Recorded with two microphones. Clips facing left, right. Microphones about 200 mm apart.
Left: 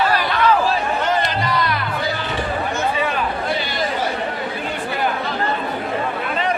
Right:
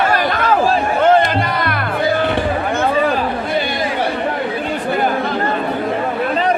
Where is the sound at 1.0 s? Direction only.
55° right (ahead or behind).